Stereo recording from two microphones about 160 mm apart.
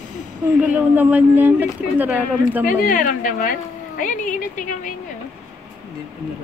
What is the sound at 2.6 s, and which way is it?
A woman's voice, 55° left (ahead or behind).